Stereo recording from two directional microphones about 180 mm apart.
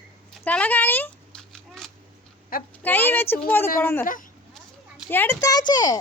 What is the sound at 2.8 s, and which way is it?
A woman's voice, 10° left (ahead or behind).